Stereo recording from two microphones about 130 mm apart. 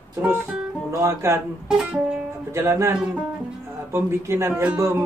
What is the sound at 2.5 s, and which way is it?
Speech, 20° right (ahead or behind).